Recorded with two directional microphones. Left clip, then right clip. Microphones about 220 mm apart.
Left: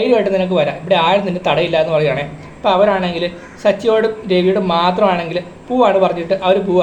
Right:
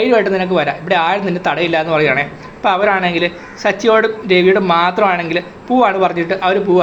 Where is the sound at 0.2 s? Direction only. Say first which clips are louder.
Even; 10° right (ahead or behind).